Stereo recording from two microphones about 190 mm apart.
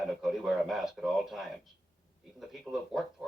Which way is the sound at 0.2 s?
Centre (ahead or behind).